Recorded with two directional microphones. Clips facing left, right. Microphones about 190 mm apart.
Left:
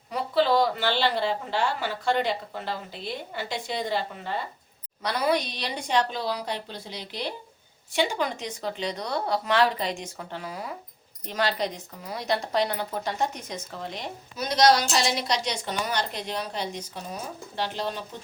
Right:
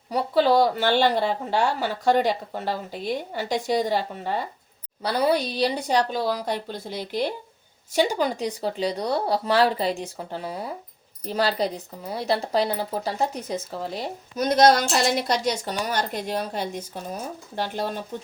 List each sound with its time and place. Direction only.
0.1 s a woman's voice: 40° right (ahead or behind)
14.3 s speech: 50° right (ahead or behind)